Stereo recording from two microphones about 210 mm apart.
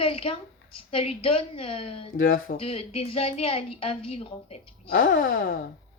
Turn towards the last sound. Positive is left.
turn(degrees=65)  # may be behind; listen again after turning